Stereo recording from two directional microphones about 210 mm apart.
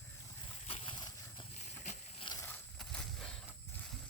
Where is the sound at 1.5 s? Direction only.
35° left (ahead or behind).